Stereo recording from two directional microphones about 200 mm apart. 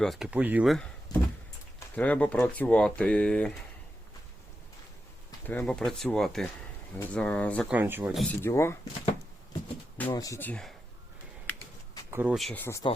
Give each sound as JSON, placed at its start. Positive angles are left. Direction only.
{"t": 0.0, "sound": "speech", "side_deg": 0}
{"t": 1.1, "sound": "a sound", "side_deg": 20}
{"t": 2.0, "sound": "speech", "side_deg": 5}
{"t": 5.5, "sound": "speech", "side_deg": 5}
{"t": 7.7, "sound": "speech", "side_deg": -10}
{"t": 8.4, "sound": "speech", "side_deg": 10}
{"t": 10.0, "sound": "speech", "side_deg": 15}
{"t": 12.1, "sound": "speech", "side_deg": -5}
{"t": 12.6, "sound": "speech", "side_deg": 15}